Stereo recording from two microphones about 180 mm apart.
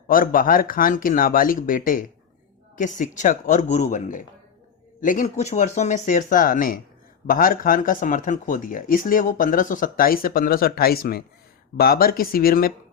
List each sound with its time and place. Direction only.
0.1 s speech: 50° left (ahead or behind)